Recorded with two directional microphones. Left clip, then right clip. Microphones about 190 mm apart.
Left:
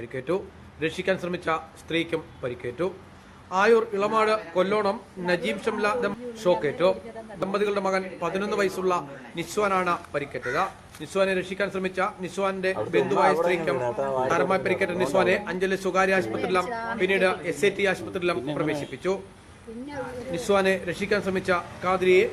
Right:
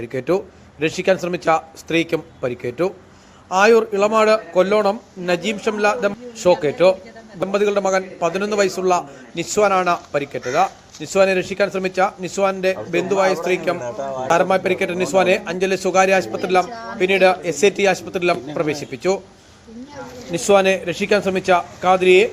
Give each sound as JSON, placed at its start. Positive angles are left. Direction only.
{"t": 0.0, "sound": "a man's voice", "side_deg": -30}
{"t": 13.8, "sound": "a man's voice", "side_deg": 50}
{"t": 14.3, "sound": "a man's voice", "side_deg": -25}
{"t": 20.3, "sound": "a man's voice", "side_deg": -25}